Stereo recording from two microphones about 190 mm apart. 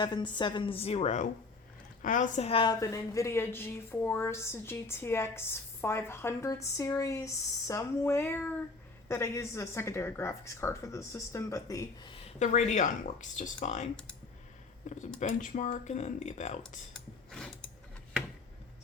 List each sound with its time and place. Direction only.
0.0 s a woman's voice: 25° left (ahead or behind)
12.1 s speech: 35° left (ahead or behind)
14.8 s speech: 40° left (ahead or behind)
16.9 s filing: centre (ahead or behind)